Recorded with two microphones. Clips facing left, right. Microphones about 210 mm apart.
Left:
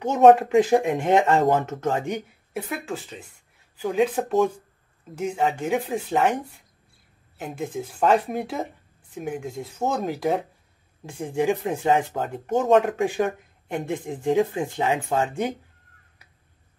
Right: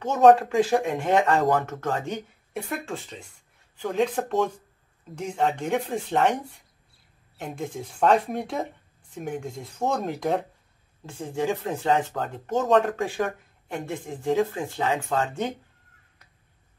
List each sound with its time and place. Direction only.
0.0 s speech: 20° left (ahead or behind)
2.5 s speech: centre (ahead or behind)
11.1 s speech: 15° left (ahead or behind)